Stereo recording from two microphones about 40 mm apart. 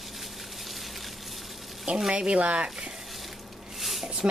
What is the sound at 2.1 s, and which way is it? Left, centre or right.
Speech, right.